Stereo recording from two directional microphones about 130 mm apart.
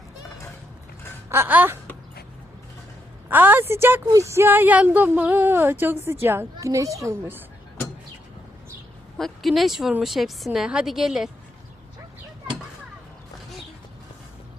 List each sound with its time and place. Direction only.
1.3 s a woman's voice: 15° right (ahead or behind)
3.2 s a woman's voice: 15° right (ahead or behind)
9.1 s a woman's voice: centre (ahead or behind)